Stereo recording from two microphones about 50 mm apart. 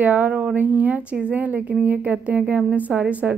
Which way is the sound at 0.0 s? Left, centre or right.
Right.